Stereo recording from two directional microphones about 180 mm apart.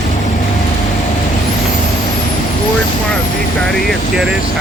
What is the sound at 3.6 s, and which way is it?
Speech, centre (ahead or behind).